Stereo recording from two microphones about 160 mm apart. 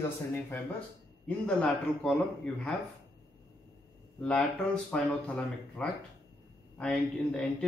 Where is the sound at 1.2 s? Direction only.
5° left (ahead or behind).